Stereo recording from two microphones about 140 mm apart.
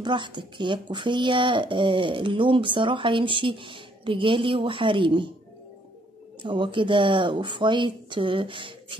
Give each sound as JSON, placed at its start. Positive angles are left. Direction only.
{"t": 0.0, "sound": "speech", "side_deg": -35}
{"t": 6.4, "sound": "speech", "side_deg": -35}